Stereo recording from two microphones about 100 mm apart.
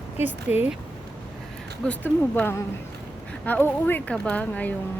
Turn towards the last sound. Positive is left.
turn(degrees=15)  # may be behind; listen again after turning